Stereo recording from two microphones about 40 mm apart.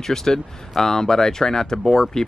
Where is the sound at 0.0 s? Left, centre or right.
Centre.